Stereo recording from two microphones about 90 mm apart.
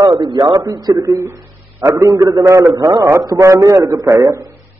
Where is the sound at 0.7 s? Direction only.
45° right (ahead or behind); by 2.0 s 30° right (ahead or behind).